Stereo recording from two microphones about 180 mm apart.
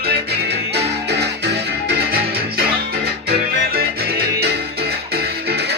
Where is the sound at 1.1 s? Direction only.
65° right (ahead or behind).